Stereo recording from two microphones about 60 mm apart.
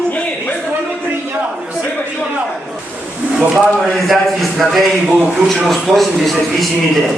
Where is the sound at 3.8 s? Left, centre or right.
Centre.